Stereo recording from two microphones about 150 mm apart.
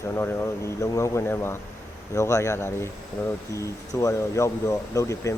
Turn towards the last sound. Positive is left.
turn(degrees=20)  # may be behind; listen again after turning